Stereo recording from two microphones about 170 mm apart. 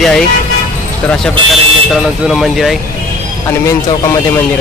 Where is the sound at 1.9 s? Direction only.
Centre (ahead or behind).